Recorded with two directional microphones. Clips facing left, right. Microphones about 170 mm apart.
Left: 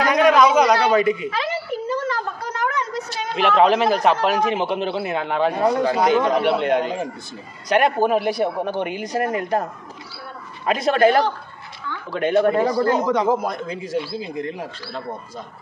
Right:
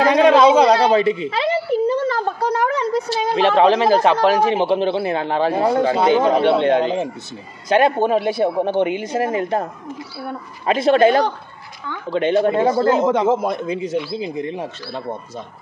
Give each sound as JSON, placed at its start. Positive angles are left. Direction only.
{"t": 0.0, "sound": "a woman's voice", "side_deg": -30}
{"t": 10.7, "sound": "a man's voice", "side_deg": -25}